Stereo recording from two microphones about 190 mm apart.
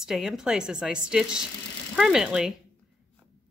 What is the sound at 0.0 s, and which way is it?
A woman's voice, centre (ahead or behind).